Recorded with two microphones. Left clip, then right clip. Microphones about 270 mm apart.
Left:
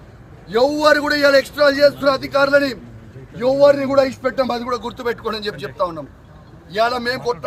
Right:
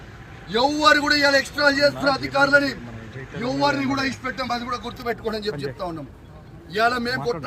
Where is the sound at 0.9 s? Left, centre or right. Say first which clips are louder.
Left 2 dB; left.